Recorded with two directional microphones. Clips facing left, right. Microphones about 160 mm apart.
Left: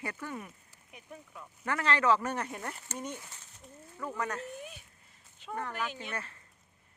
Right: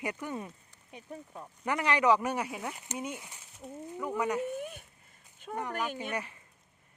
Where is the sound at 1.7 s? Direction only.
15° right (ahead or behind).